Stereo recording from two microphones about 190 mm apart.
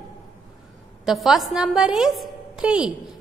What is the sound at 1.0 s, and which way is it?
A woman's voice, centre (ahead or behind).